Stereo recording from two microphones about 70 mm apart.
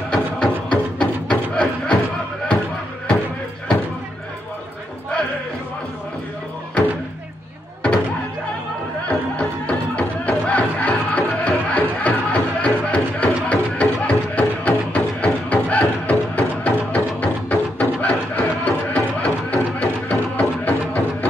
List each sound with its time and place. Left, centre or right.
0.1 s music: centre
9.0 s music: centre